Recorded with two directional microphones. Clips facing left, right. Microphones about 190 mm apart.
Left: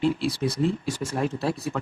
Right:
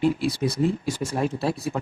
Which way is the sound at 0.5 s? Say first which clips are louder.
Right 1 dB; 15° right (ahead or behind).